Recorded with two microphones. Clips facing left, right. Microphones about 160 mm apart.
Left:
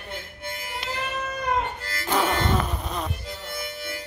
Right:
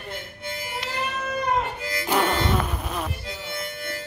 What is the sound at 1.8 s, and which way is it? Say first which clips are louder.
Music: right 2 dB; 15° right (ahead or behind).